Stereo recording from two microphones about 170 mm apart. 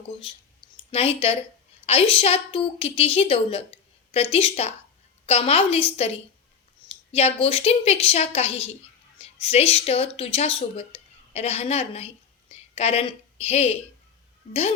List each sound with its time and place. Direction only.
0.9 s a woman's voice: 35° left (ahead or behind)
6.8 s a woman's voice: 35° left (ahead or behind)